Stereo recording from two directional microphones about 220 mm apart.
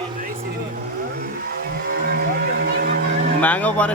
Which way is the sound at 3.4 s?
5° left (ahead or behind).